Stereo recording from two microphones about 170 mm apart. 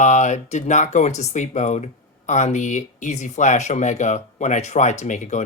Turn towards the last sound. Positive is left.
turn(degrees=45)  # may be behind; listen again after turning